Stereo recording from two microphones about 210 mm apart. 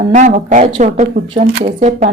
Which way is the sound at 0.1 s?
35° right (ahead or behind).